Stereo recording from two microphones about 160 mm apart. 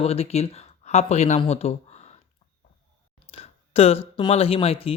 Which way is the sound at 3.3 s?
40° left (ahead or behind).